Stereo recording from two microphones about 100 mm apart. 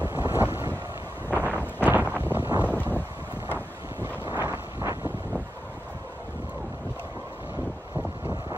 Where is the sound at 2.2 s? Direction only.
20° right (ahead or behind).